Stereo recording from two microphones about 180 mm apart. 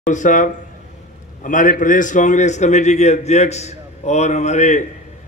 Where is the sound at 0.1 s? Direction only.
45° left (ahead or behind).